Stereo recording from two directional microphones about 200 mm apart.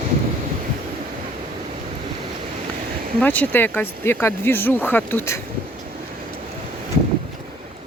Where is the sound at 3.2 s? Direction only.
10° left (ahead or behind).